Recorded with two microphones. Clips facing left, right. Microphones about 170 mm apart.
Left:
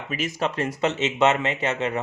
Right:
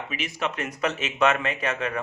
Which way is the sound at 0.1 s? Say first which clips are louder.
Left 6 dB; 45° left (ahead or behind).